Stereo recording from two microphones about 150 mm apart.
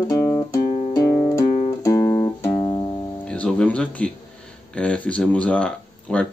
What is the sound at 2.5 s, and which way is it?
Music, 40° left (ahead or behind).